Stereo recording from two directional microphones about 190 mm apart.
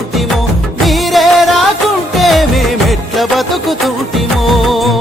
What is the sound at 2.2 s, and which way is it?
Music of bollywood, centre (ahead or behind).